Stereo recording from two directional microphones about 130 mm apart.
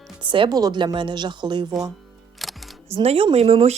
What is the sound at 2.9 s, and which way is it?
Speech, 50° right (ahead or behind).